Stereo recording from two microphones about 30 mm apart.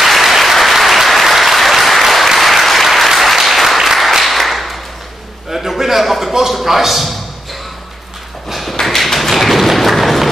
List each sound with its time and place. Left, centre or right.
0.2 s applause: centre
5.5 s a sound: centre
6.6 s a man's voice: centre
8.8 s tap: centre